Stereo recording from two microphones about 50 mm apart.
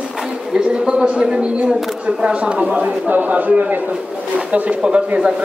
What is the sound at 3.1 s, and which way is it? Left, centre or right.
A man's voice, right.